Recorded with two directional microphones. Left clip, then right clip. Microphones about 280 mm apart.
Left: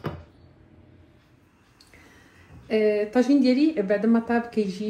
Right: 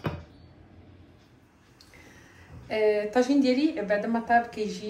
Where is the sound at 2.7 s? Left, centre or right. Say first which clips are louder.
Left 2 dB; left.